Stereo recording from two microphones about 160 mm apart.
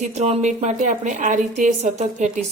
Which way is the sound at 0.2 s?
45° right (ahead or behind).